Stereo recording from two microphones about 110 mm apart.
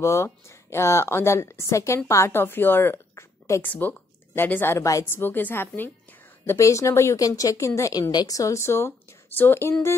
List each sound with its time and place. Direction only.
0.0 s a woman's voice: 25° left (ahead or behind)